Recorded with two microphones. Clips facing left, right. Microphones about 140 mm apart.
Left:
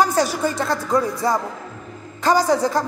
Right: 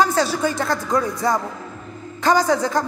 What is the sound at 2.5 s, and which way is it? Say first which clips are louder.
Speech: left 1 dB; 35° left (ahead or behind).